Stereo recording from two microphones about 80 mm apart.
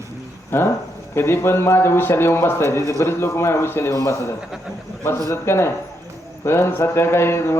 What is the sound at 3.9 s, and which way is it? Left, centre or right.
Speech, left.